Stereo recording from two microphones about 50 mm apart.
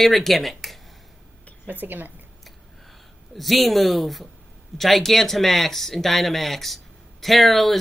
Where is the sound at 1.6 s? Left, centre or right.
Right.